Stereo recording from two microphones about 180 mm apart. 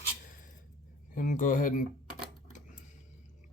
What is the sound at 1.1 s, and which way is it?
Speech, 50° left (ahead or behind).